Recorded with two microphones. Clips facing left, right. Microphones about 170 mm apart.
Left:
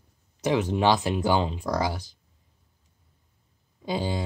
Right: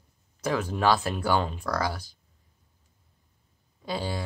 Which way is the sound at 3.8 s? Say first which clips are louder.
Left 3 dB; 20° left (ahead or behind).